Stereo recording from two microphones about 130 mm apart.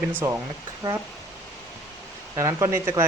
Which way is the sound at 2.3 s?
25° right (ahead or behind).